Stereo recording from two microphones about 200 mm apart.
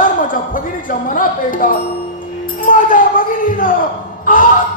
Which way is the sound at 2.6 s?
40° left (ahead or behind).